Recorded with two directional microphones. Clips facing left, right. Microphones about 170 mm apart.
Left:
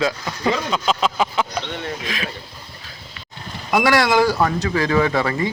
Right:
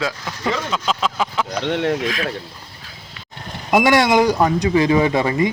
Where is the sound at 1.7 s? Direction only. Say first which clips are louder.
Right 9 dB; 80° right.